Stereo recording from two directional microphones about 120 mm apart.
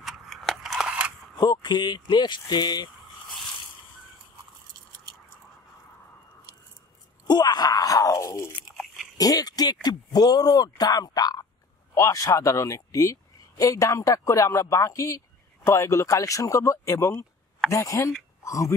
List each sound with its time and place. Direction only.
0.0 s a sound: centre (ahead or behind)
1.3 s speech: 35° left (ahead or behind)
7.2 s speech: 35° left (ahead or behind)